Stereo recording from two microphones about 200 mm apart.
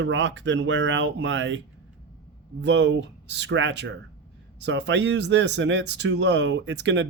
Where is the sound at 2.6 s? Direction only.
65° right (ahead or behind).